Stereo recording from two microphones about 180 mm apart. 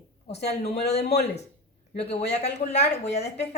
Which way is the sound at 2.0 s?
35° left (ahead or behind).